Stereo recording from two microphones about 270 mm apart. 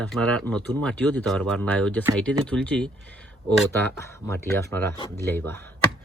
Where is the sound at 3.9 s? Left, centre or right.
Centre.